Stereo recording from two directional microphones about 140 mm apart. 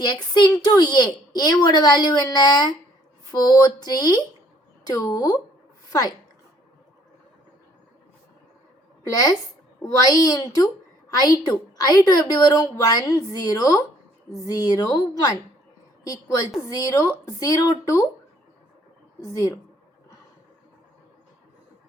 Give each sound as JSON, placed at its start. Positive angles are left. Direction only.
{"t": 0.0, "sound": "a woman's voice", "side_deg": 30}
{"t": 9.0, "sound": "a woman's voice", "side_deg": 25}
{"t": 19.2, "sound": "a woman's voice", "side_deg": 25}